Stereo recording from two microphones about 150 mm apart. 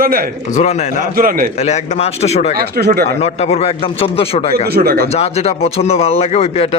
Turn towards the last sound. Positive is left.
turn(degrees=45)  # may be behind; listen again after turning